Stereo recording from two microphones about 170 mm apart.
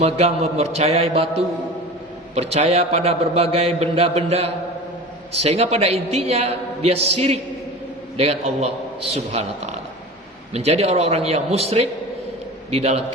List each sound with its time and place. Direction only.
0.0 s a man's voice: 40° right (ahead or behind)